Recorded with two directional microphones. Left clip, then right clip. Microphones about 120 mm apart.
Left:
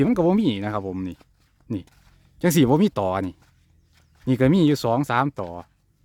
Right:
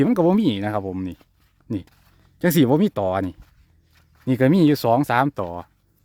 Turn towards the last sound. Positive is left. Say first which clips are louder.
# right 3 dB
turn(degrees=-20)  # may be behind; listen again after turning